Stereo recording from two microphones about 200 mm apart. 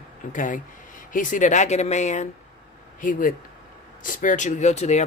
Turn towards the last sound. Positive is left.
turn(degrees=35)  # may be behind; listen again after turning